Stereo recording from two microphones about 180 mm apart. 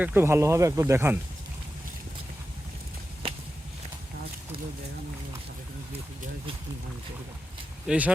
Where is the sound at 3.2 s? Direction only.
30° right (ahead or behind).